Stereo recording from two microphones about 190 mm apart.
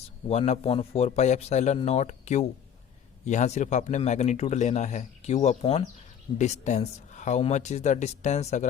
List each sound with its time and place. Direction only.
0.3 s speech: 35° left (ahead or behind)